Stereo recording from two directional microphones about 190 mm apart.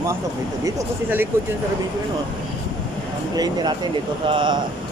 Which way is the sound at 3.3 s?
20° right (ahead or behind).